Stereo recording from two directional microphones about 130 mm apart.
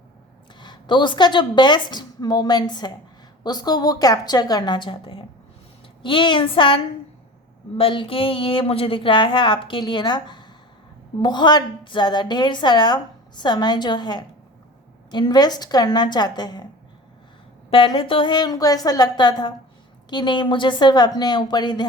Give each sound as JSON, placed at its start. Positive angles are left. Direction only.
{"t": 0.6, "sound": "a woman's voice", "side_deg": 35}
{"t": 17.7, "sound": "a woman's voice", "side_deg": 40}